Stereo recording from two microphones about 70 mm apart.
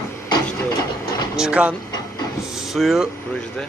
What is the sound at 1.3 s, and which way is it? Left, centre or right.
Speech, centre.